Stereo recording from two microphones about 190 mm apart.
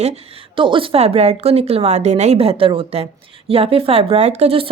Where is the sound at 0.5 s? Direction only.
25° right (ahead or behind).